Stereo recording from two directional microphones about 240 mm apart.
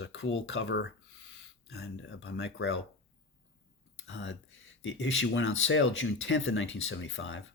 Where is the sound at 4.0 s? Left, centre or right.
Left.